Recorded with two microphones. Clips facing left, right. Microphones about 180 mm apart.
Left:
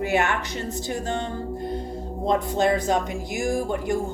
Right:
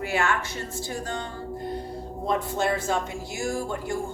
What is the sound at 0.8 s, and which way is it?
Speech, 25° left (ahead or behind).